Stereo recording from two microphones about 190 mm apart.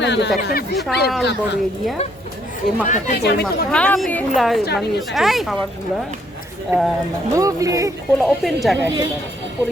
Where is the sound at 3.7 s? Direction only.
5° left (ahead or behind).